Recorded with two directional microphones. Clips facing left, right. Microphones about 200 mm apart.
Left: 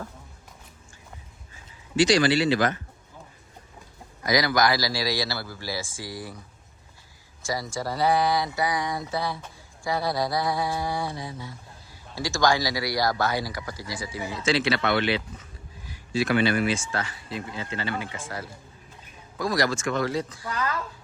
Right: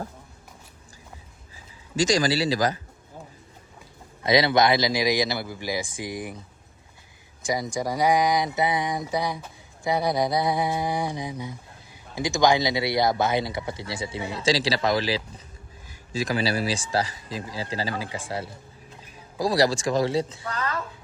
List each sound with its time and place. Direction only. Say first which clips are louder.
2.0 s speech: left 2 dB; 40° right (ahead or behind)
4.2 s mantra: right 3 dB; 25° right (ahead or behind)
7.4 s speech: right 3 dB; 20° right (ahead or behind)
9.8 s mantra: right 3 dB; 20° right (ahead or behind)
16.3 s speech: left 2 dB; 35° right (ahead or behind)